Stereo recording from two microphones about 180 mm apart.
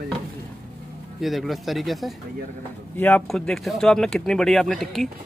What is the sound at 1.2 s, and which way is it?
Speech, centre (ahead or behind).